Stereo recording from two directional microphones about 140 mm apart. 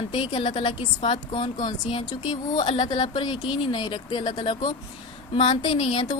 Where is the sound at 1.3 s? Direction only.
50° left (ahead or behind).